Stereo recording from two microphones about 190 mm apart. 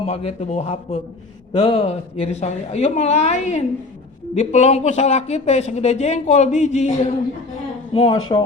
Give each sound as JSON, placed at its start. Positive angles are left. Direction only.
{"t": 0.0, "sound": "speech", "side_deg": 30}